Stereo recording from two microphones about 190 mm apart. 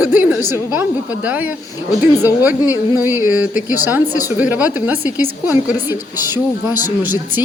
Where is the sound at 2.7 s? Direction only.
10° right (ahead or behind).